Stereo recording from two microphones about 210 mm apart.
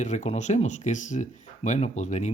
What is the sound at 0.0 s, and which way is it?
Speech, 35° left (ahead or behind).